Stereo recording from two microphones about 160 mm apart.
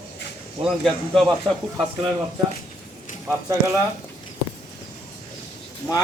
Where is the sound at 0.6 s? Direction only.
Centre (ahead or behind).